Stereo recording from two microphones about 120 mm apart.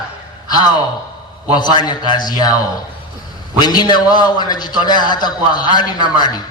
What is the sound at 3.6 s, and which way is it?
A man's voice, 35° left (ahead or behind).